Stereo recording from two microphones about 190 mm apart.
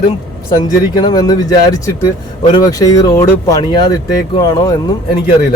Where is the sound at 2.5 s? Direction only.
20° left (ahead or behind).